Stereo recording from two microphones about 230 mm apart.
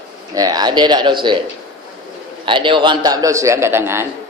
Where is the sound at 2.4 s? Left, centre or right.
Right.